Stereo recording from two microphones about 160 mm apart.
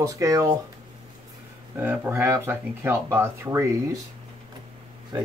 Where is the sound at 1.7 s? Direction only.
10° right (ahead or behind).